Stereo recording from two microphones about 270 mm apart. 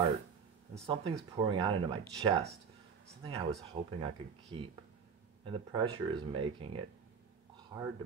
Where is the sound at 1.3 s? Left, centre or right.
Centre.